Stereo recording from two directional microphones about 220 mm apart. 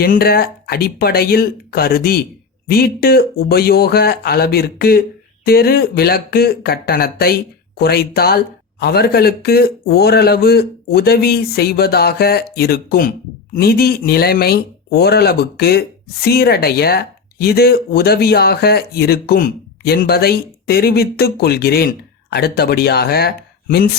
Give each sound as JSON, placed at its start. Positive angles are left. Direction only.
{"t": 0.0, "sound": "speech", "side_deg": 45}